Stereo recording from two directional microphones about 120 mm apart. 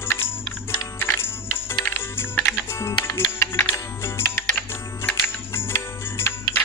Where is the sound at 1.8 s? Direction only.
15° left (ahead or behind).